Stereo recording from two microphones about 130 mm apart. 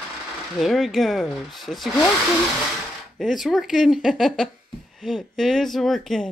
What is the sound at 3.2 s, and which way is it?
Speech, centre (ahead or behind).